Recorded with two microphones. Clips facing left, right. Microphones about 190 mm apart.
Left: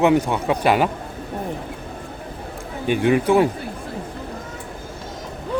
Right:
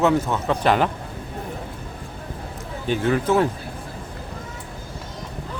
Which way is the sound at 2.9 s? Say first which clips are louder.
Left 3 dB; 15° left (ahead or behind).